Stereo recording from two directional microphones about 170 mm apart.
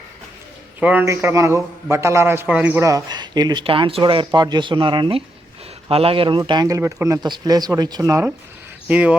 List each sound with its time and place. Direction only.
0.8 s a man's voice: 10° right (ahead or behind)
8.9 s speech: 10° right (ahead or behind)